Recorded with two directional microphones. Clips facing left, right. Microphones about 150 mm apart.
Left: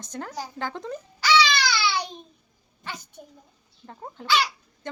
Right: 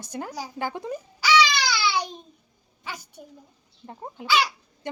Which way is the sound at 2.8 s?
10° right (ahead or behind).